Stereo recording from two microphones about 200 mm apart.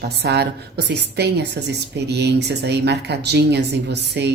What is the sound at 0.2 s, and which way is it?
Speech, 55° right (ahead or behind).